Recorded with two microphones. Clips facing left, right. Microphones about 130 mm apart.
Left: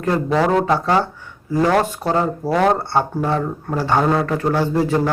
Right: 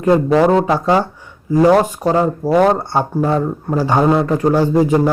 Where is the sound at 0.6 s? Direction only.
15° right (ahead or behind).